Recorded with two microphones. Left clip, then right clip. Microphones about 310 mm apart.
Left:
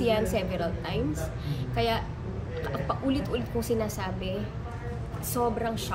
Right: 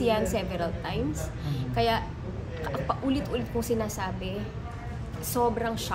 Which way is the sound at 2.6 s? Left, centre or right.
Centre.